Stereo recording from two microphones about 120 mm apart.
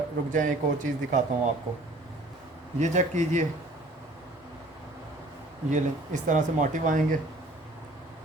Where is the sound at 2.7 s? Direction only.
85° right.